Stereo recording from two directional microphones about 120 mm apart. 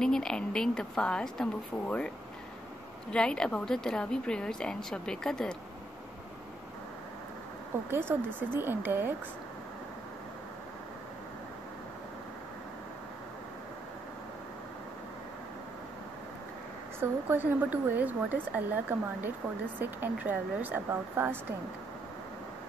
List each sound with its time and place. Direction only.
0.0 s speech: 5° left (ahead or behind)
7.9 s speech: 15° right (ahead or behind)
17.0 s speech: 15° right (ahead or behind)